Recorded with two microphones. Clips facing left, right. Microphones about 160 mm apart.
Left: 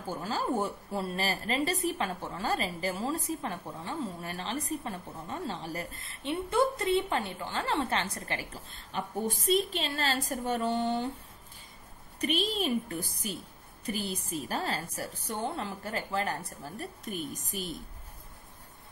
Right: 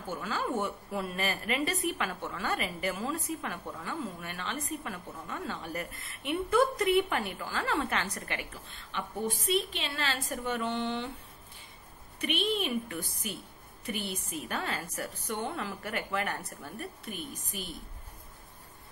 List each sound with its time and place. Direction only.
0.0 s a woman's voice: 35° left (ahead or behind)
8.9 s a woman's voice: 40° left (ahead or behind)
12.2 s a woman's voice: 35° left (ahead or behind)